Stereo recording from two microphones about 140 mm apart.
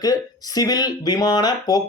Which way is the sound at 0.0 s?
25° left (ahead or behind).